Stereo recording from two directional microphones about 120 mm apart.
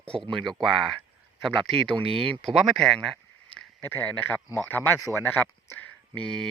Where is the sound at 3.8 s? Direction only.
15° left (ahead or behind).